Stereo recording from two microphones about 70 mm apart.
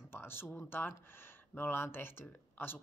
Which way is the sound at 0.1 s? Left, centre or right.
Left.